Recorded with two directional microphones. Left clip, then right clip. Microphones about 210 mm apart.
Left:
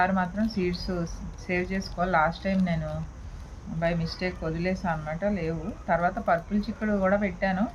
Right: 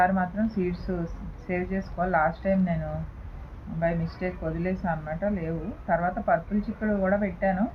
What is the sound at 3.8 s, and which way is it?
Speech, 20° left (ahead or behind).